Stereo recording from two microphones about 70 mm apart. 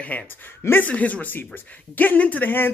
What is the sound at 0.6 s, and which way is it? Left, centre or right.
Speech, left.